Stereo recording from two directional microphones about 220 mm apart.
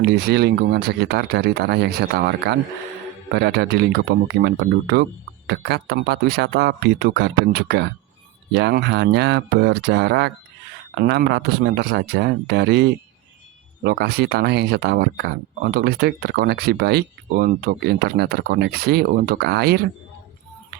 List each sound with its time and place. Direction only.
0.0 s speech: 50° right (ahead or behind)